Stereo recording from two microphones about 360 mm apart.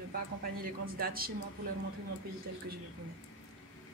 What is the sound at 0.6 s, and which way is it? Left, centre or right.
Speech, right.